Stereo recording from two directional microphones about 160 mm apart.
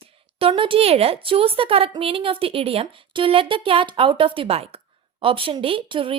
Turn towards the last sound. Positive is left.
turn(degrees=-30)  # may be behind; listen again after turning